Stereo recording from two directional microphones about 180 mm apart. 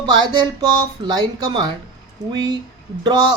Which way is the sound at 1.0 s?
25° right (ahead or behind).